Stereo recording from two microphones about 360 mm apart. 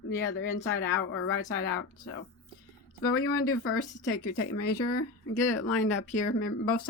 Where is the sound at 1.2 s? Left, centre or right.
Left.